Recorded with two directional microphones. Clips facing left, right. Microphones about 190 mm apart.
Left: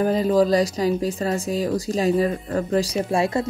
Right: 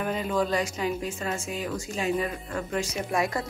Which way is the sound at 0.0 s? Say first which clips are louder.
Left 9 dB; 35° left (ahead or behind).